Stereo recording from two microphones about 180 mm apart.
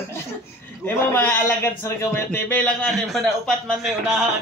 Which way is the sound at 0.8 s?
10° left (ahead or behind).